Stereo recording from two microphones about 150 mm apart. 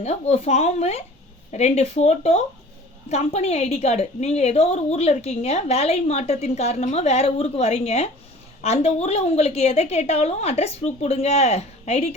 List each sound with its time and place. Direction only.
0.0 s a woman's voice: 45° left (ahead or behind)